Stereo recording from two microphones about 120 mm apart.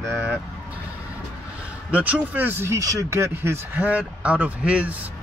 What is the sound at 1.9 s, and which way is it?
Speech, 10° right (ahead or behind).